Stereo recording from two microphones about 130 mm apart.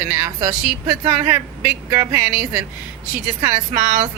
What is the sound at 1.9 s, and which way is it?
Speech, 20° right (ahead or behind).